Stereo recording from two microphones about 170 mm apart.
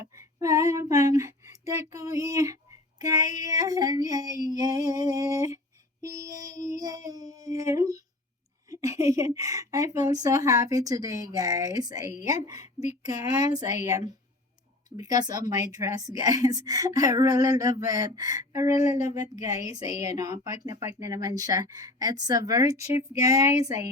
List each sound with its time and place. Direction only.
0.2 s child singing: 20° right (ahead or behind)
3.0 s a woman's voice: 20° right (ahead or behind)